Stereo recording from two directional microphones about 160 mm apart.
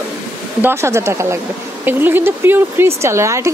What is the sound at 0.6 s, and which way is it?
A woman's voice, 15° right (ahead or behind).